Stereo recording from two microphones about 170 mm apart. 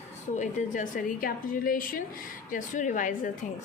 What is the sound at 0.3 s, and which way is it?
A woman's voice, 50° left (ahead or behind).